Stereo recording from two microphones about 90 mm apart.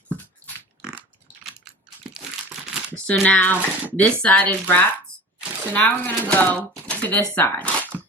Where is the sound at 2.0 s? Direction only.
5° right (ahead or behind).